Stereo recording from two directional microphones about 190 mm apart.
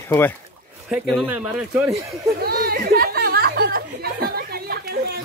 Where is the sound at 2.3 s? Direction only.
55° right (ahead or behind).